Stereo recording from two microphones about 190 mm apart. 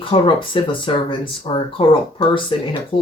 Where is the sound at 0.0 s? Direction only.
25° left (ahead or behind).